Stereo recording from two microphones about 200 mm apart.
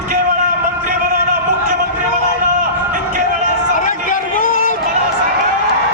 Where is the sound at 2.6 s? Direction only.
40° right (ahead or behind).